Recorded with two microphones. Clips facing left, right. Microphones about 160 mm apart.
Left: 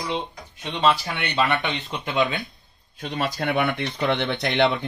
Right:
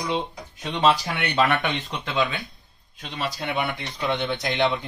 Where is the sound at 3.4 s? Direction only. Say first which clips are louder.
Left 5 dB; 60° left (ahead or behind).